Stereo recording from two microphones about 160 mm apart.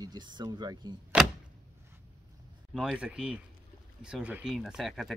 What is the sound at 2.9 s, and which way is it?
Speech, 5° right (ahead or behind).